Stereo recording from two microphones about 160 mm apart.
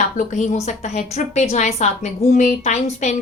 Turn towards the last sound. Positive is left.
turn(degrees=45)  # may be behind; listen again after turning